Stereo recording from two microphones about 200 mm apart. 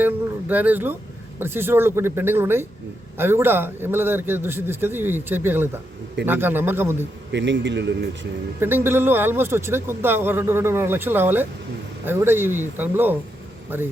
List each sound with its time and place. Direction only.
0.0 s speech: 10° right (ahead or behind)
7.3 s a man's voice: 60° right (ahead or behind)
8.6 s speech: 10° right (ahead or behind)